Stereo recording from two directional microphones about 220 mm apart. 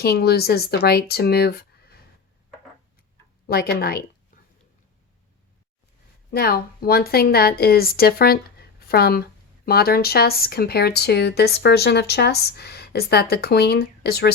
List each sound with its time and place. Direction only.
0.0 s speech: 45° left (ahead or behind)
3.5 s speech: 45° left (ahead or behind)
4.3 s a sound: 40° left (ahead or behind)
6.3 s speech: 45° left (ahead or behind)